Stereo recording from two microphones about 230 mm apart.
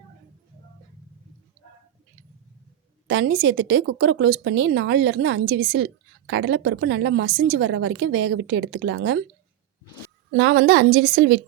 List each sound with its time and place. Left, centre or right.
3.1 s a woman's voice: right
10.3 s a woman's voice: right